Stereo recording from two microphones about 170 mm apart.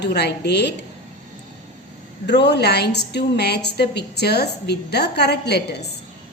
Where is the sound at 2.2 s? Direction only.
85° left.